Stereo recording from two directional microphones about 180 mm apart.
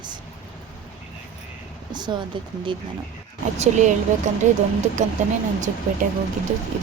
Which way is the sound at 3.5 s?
40° right (ahead or behind).